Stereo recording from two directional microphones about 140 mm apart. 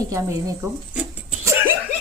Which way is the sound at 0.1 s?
20° right (ahead or behind).